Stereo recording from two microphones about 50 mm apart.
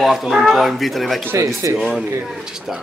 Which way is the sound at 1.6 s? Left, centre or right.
Right.